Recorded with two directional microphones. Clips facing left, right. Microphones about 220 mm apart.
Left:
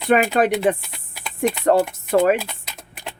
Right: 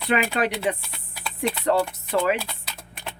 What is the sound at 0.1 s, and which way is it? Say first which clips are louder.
Speech: left 6 dB; 50° left (ahead or behind).